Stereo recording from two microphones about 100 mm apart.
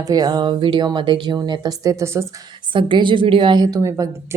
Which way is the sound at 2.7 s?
55° right (ahead or behind).